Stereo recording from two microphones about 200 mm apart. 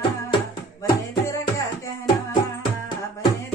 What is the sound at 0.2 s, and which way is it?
Music, 15° left (ahead or behind).